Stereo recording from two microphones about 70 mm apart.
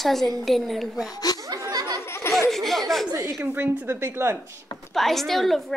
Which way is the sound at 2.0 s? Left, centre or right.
Left.